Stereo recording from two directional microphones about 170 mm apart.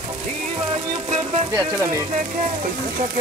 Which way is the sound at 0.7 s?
35° right (ahead or behind).